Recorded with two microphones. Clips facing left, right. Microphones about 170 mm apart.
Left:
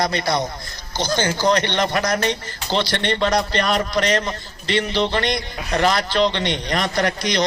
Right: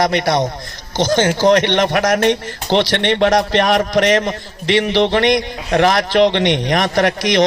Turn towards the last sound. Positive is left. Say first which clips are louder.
# right 6 dB
turn(degrees=-85)